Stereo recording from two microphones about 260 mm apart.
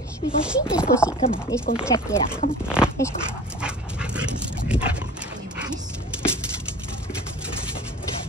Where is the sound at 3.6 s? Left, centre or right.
Centre.